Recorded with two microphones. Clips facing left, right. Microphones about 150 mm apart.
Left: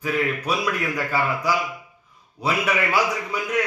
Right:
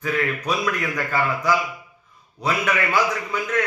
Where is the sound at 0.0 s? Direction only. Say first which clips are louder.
Even; 5° left (ahead or behind).